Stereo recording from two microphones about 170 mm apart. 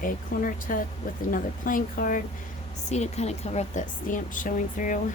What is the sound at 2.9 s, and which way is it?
Speech, 40° left (ahead or behind).